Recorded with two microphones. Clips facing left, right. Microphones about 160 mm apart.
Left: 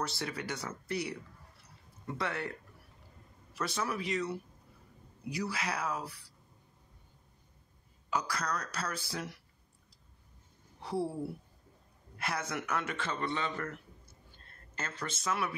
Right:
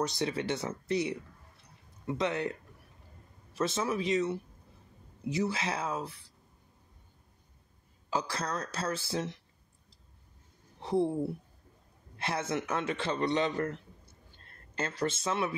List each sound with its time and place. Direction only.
0.0 s a man's voice: 20° right (ahead or behind)
3.5 s a man's voice: 25° right (ahead or behind)
8.1 s a man's voice: 25° right (ahead or behind)
10.8 s speech: 20° right (ahead or behind)
12.2 s a man's voice: 25° right (ahead or behind)
14.8 s a man's voice: 30° right (ahead or behind)